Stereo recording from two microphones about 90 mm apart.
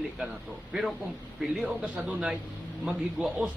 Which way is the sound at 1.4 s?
5° right (ahead or behind).